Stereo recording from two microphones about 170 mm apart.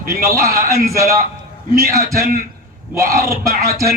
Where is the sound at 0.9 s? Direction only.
15° right (ahead or behind).